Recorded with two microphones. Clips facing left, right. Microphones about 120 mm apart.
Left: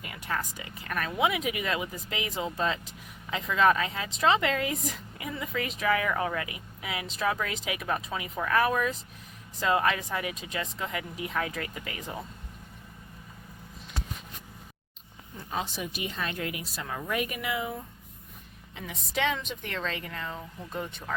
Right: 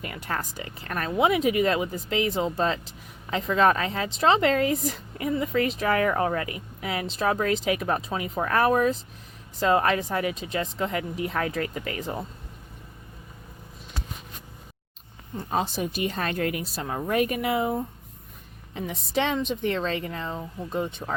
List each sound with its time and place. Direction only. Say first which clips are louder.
0.0 s speech: right 2 dB; 45° right (ahead or behind)
15.4 s speech: right 7 dB; 45° right (ahead or behind)
15.6 s speech: right 7 dB; 35° right (ahead or behind)
16.8 s speech: right 7 dB; 30° right (ahead or behind)
19.1 s speech: right 4 dB; 30° right (ahead or behind)